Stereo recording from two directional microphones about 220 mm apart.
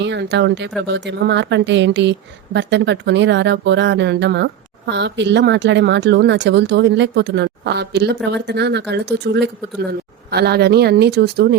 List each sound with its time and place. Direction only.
0.0 s speech: 50° right (ahead or behind)